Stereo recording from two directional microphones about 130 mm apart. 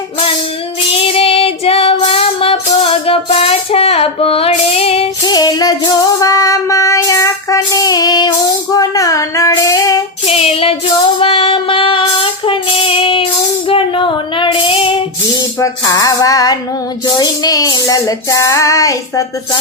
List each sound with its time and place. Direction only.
1.0 s child singing: 45° left (ahead or behind)
2.0 s music: 50° left (ahead or behind)
5.2 s music: 30° left (ahead or behind)
8.7 s female singing: 30° left (ahead or behind)
10.2 s child singing: 50° left (ahead or behind)
11.2 s female singing: 45° left (ahead or behind)
15.6 s music: 25° left (ahead or behind)